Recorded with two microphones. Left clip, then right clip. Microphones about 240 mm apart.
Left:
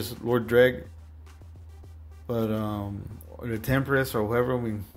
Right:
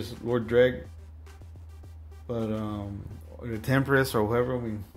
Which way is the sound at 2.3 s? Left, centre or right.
Centre.